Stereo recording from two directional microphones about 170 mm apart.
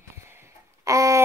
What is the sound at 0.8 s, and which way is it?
Child singing, 20° right (ahead or behind).